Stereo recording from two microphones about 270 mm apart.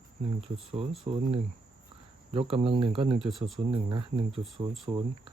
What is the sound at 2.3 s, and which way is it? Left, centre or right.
Speech, right.